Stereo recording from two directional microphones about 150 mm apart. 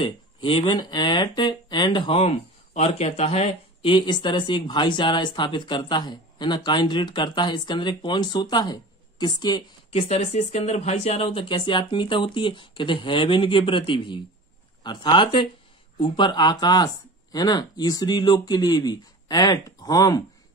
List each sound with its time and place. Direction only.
0.0 s speech: 35° left (ahead or behind)
9.9 s speech: 45° left (ahead or behind); by 20.2 s 25° left (ahead or behind)